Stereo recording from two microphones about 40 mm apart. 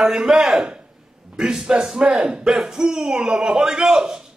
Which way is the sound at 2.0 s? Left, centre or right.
Right.